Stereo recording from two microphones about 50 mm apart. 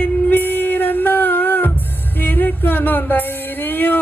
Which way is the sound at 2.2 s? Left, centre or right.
Left.